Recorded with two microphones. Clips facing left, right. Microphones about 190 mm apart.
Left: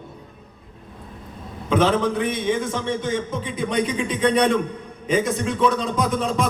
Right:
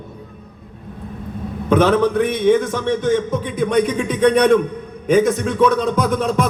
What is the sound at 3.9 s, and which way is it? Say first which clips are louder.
Speech: right 5 dB; 45° right (ahead or behind).